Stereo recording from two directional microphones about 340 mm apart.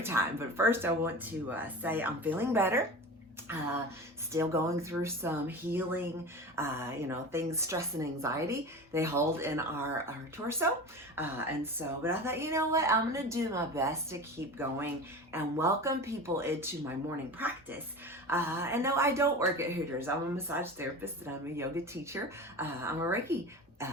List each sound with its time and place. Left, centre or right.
0.0 s speech: centre
4.3 s speech: centre
18.3 s speech: centre